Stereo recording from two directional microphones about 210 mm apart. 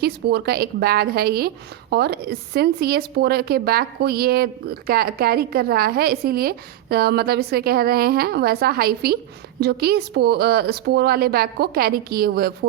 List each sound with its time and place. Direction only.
0.0 s a woman's voice: 50° right (ahead or behind)